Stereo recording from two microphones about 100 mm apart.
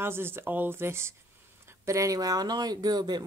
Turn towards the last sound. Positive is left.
turn(degrees=-45)  # may be behind; listen again after turning